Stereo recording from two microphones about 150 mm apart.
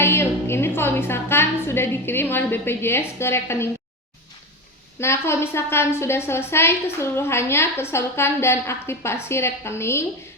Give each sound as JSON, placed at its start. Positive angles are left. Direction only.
{"t": 0.0, "sound": "a woman's voice", "side_deg": 15}
{"t": 4.9, "sound": "a woman's voice", "side_deg": 15}